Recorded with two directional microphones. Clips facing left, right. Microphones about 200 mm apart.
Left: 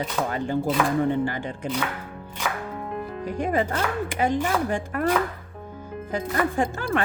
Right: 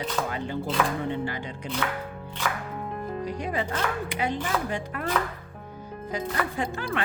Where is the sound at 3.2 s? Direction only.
50° left (ahead or behind).